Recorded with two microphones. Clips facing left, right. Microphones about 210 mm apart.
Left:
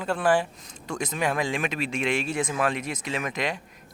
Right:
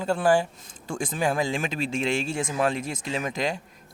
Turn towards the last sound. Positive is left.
turn(degrees=-25)  # may be behind; listen again after turning